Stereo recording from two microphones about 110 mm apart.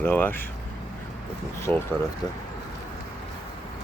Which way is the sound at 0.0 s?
20° left (ahead or behind).